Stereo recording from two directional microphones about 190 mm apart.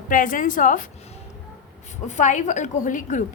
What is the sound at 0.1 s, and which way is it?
Speech, 45° left (ahead or behind).